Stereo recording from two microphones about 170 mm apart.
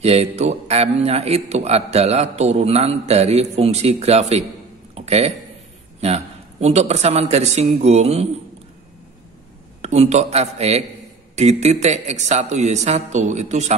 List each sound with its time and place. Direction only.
0.0 s a man's voice: 35° right (ahead or behind)
4.9 s a sound: 40° right (ahead or behind)
5.9 s a man's voice: 40° right (ahead or behind)
9.8 s a man's voice: 40° right (ahead or behind)